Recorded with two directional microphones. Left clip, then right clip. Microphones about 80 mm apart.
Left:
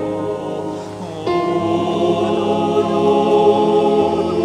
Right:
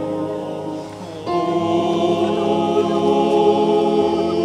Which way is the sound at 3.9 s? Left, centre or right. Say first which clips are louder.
Left 2 dB; centre.